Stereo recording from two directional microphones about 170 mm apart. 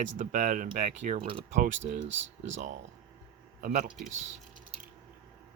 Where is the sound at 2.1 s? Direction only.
90° right.